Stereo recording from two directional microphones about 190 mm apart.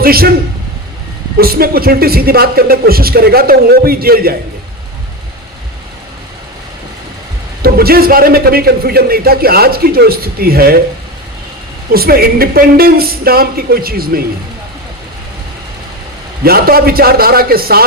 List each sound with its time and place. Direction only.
0.0 s a man's voice: 50° right (ahead or behind)
1.4 s a man's voice: 50° right (ahead or behind)
7.6 s a man's voice: 55° right (ahead or behind)
11.9 s a man's voice: 50° right (ahead or behind)
16.4 s a man's voice: 55° right (ahead or behind)